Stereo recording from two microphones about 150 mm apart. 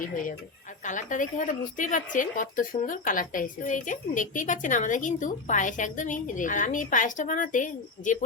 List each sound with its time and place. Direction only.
0.9 s a woman's voice: 55° left (ahead or behind)